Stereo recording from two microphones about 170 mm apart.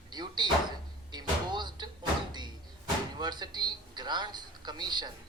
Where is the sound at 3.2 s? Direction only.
25° right (ahead or behind).